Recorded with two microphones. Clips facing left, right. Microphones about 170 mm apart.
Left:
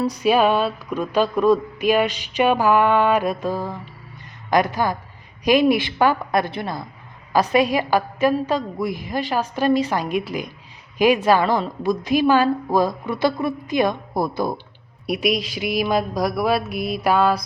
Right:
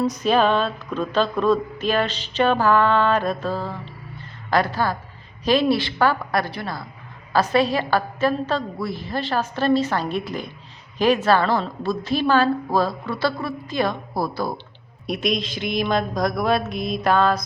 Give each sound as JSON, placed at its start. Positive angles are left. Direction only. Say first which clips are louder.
{"t": 0.2, "sound": "speech", "louder": "left 3 dB", "side_deg": 10}
{"t": 15.0, "sound": "speech", "louder": "left 2 dB", "side_deg": 10}